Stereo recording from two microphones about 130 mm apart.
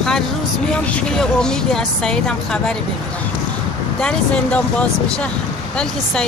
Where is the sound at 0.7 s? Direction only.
10° left (ahead or behind).